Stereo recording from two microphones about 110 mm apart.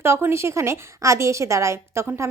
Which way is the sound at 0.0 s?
20° right (ahead or behind).